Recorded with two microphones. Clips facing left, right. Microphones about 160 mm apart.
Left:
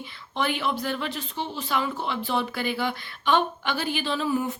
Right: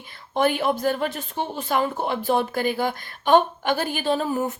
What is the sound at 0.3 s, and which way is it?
Speech, 45° right (ahead or behind).